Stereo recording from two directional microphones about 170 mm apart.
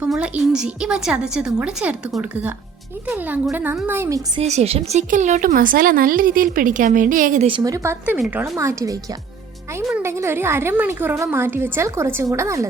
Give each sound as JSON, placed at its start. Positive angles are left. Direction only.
{"t": 0.0, "sound": "a woman's voice", "side_deg": -5}
{"t": 4.4, "sound": "speech", "side_deg": -40}
{"t": 7.4, "sound": "a woman's voice", "side_deg": -25}